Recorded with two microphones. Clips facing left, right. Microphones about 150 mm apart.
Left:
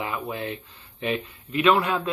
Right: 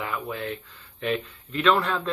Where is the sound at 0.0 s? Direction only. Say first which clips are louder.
Left 1 dB; 20° left (ahead or behind).